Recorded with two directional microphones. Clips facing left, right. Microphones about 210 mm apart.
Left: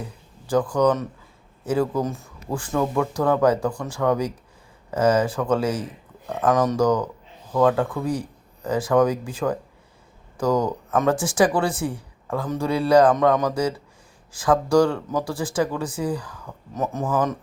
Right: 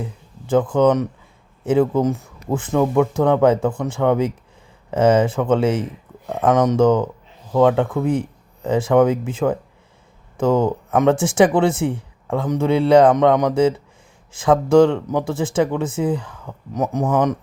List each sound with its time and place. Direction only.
0.4 s speech: 25° right (ahead or behind)